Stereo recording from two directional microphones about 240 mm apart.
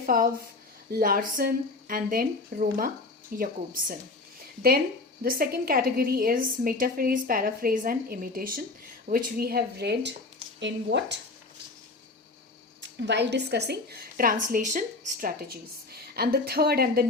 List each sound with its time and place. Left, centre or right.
0.0 s a woman's voice: right
5.2 s a woman's voice: right
12.8 s a woman's voice: right